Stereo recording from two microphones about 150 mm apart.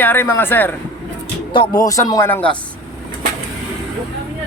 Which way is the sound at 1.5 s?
30° left (ahead or behind).